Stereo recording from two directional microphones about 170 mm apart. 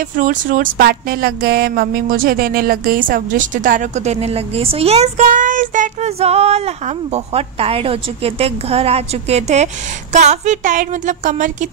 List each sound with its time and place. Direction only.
0.1 s a woman's voice: 50° right (ahead or behind)